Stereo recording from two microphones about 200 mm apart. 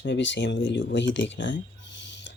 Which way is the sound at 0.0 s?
65° left (ahead or behind).